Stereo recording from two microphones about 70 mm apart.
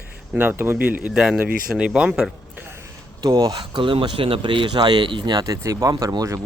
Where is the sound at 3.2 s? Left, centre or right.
Right.